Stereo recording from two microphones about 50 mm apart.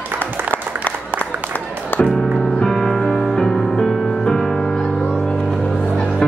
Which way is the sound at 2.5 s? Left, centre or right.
Centre.